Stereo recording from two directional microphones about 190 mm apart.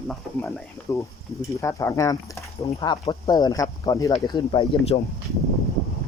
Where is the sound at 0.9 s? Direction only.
15° left (ahead or behind).